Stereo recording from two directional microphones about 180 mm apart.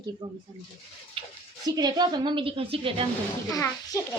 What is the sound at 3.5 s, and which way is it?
Speech, 20° left (ahead or behind).